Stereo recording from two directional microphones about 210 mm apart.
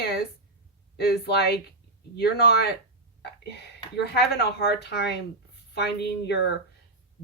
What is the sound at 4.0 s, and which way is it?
A woman's voice, 50° left (ahead or behind).